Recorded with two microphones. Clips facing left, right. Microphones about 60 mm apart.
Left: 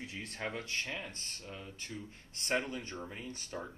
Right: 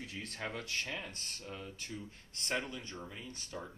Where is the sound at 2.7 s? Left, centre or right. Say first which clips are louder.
Left 3 dB; left.